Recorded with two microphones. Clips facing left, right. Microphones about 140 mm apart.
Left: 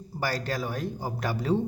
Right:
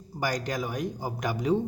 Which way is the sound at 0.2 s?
15° right (ahead or behind).